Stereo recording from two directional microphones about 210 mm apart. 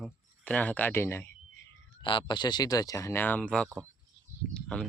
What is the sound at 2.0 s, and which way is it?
Speech, 25° left (ahead or behind).